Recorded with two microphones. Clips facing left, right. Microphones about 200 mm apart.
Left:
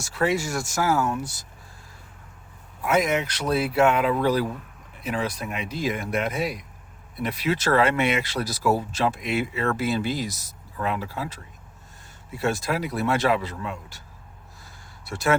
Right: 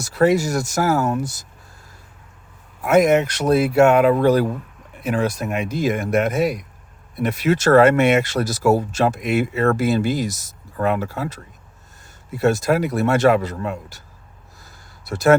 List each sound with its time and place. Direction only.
0.0 s speech: 40° right (ahead or behind)
2.8 s speech: 50° right (ahead or behind)
15.0 s speech: 40° right (ahead or behind)